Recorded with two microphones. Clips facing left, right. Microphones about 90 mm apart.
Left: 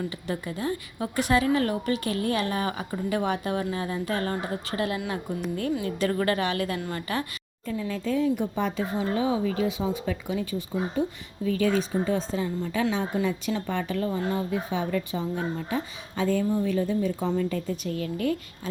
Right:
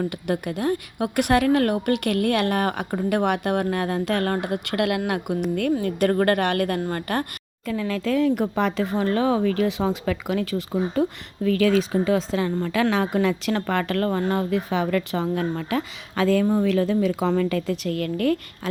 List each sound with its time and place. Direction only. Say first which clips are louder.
0.0 s a woman's voice: right 6 dB; 65° right (ahead or behind)
5.8 s a woman's voice: right 5 dB; 55° right (ahead or behind)
7.7 s a woman's voice: right 4 dB; 90° right; by 18.7 s 65° right (ahead or behind)